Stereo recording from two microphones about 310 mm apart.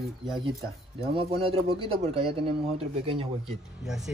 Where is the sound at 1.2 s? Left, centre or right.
Centre.